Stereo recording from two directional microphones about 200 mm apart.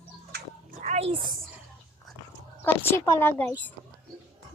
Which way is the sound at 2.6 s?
10° left (ahead or behind).